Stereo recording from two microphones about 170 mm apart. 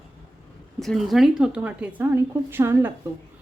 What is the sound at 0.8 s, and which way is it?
A woman's voice, centre (ahead or behind).